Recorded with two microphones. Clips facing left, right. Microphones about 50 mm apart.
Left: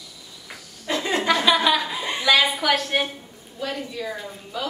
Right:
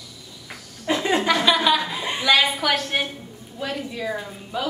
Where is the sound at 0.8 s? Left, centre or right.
Centre.